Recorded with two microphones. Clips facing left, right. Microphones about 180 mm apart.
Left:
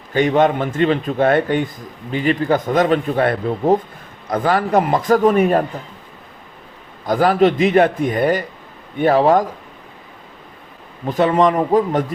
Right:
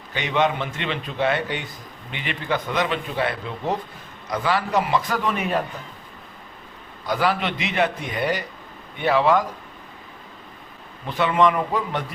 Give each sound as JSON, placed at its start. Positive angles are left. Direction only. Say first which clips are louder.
{"t": 0.1, "sound": "a man's voice", "louder": "left 8 dB", "side_deg": 45}
{"t": 7.0, "sound": "a man's voice", "louder": "left 9 dB", "side_deg": 45}
{"t": 11.0, "sound": "a man's voice", "louder": "left 5 dB", "side_deg": 40}